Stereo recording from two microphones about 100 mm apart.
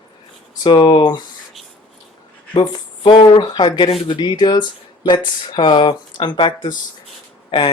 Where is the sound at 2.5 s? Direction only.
45° left (ahead or behind).